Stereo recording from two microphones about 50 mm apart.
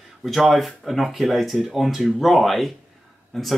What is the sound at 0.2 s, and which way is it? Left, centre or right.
Speech, centre.